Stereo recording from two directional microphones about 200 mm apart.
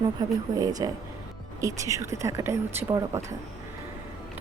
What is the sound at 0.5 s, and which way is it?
Speech, 20° right (ahead or behind).